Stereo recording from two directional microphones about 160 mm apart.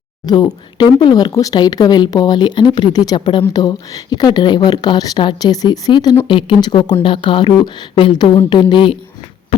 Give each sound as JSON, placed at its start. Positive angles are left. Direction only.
{"t": 0.3, "sound": "speech", "side_deg": 25}